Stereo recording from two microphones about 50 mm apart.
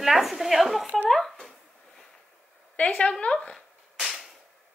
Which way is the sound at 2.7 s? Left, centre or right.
Left.